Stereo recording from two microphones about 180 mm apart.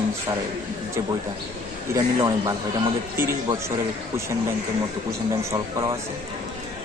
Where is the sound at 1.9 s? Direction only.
20° right (ahead or behind).